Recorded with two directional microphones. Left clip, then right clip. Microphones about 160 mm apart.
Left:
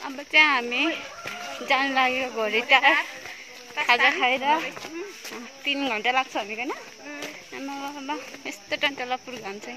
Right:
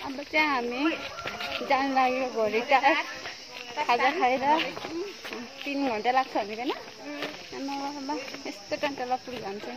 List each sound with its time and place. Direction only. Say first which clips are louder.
0.3 s speech: left 7 dB; 15° left (ahead or behind)
3.8 s speech: left 4 dB; 20° left (ahead or behind)
5.7 s speech: left 3 dB; 20° left (ahead or behind)
8.1 s speech: left 1 dB; 20° left (ahead or behind)